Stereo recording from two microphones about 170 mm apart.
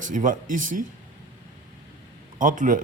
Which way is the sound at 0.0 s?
50° right (ahead or behind).